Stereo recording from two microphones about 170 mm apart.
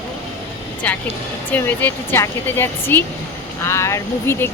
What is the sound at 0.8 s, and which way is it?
Speech, 10° left (ahead or behind).